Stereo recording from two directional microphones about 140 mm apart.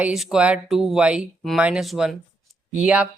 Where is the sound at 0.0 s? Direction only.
5° right (ahead or behind).